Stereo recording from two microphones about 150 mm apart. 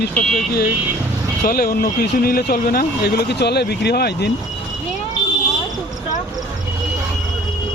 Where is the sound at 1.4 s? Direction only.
85° left.